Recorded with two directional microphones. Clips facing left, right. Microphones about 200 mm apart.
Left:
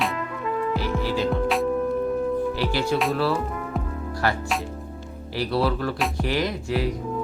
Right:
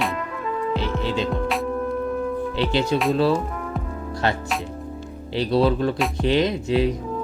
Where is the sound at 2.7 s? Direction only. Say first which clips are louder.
Right 5 dB; 20° right (ahead or behind).